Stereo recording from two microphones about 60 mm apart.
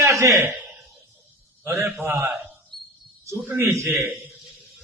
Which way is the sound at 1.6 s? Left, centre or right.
Right.